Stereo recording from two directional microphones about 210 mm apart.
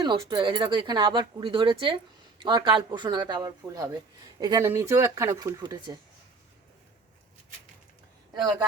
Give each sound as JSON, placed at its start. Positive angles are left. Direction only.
{"t": 0.0, "sound": "speech", "side_deg": -20}